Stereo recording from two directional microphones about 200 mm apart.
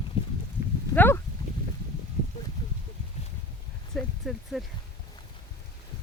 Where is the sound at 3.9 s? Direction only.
Centre (ahead or behind).